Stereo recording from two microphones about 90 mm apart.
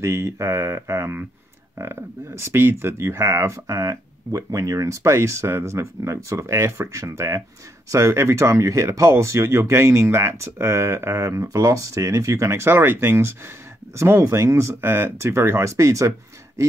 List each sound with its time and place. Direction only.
0.0 s speech: 30° right (ahead or behind)